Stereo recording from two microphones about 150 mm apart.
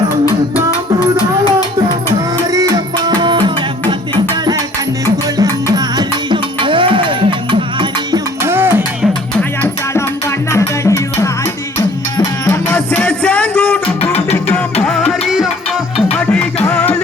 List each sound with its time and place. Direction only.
2.5 s music: 25° right (ahead or behind)
8.4 s a sound: 15° right (ahead or behind)
10.5 s music: 20° left (ahead or behind)
12.6 s music: 10° left (ahead or behind)
14.0 s music: 40° left (ahead or behind)
14.5 s music: 5° left (ahead or behind)
16.1 s music: 10° left (ahead or behind)